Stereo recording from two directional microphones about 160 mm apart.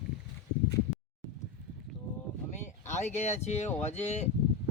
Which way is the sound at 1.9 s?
Centre (ahead or behind).